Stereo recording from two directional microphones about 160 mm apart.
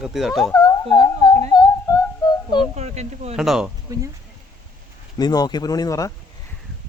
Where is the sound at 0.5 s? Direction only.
20° left (ahead or behind).